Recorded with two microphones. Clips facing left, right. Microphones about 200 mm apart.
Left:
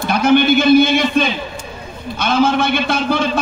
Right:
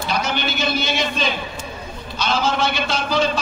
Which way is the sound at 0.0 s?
55° left (ahead or behind).